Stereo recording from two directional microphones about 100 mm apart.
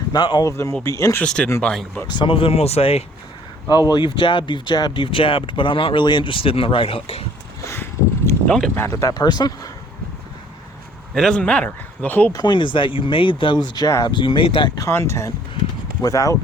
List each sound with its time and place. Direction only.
0.1 s speech: 50° left (ahead or behind)
0.4 s speech: 30° left (ahead or behind)
1.2 s a man's voice: 10° left (ahead or behind)
2.0 s speech: 50° left (ahead or behind); by 3.0 s 90° left
3.7 s speech: 45° left (ahead or behind); by 7.3 s 75° left (ahead or behind)
7.6 s a sound: 30° left (ahead or behind)
8.4 s a man's voice: 5° left (ahead or behind)
8.7 s speech: 25° left (ahead or behind)
9.1 s speech: 45° left (ahead or behind)
11.1 s a man's voice: 5° left (ahead or behind)
12.3 s speech: 45° left (ahead or behind)
14.8 s speech: 30° left (ahead or behind)